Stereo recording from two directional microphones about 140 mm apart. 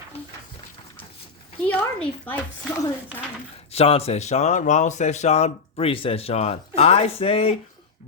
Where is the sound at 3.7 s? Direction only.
45° left (ahead or behind).